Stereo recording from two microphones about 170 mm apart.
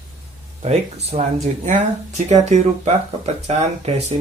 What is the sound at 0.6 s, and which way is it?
Speech, 40° right (ahead or behind).